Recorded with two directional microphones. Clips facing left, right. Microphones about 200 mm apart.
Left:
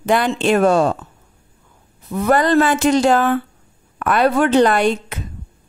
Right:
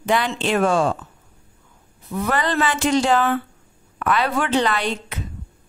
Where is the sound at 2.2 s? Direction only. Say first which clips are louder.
Left 7 dB; 45° left (ahead or behind).